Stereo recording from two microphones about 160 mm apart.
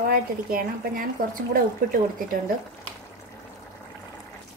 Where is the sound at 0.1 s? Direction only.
65° right (ahead or behind).